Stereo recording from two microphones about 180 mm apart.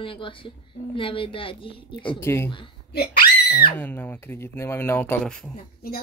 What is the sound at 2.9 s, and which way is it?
Speech, 60° left (ahead or behind).